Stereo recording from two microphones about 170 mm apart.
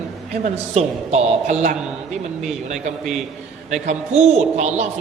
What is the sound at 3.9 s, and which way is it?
Speech, 40° right (ahead or behind).